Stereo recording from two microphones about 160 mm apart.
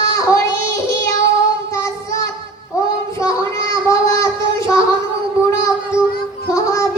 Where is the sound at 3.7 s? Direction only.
20° left (ahead or behind).